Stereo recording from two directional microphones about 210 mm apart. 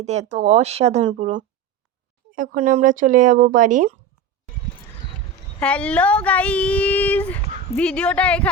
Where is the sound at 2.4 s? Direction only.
35° right (ahead or behind).